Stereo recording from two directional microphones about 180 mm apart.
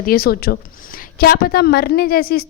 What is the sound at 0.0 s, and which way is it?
A woman's voice, 55° left (ahead or behind).